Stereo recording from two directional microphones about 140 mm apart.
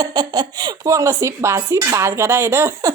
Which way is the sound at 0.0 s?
30° right (ahead or behind).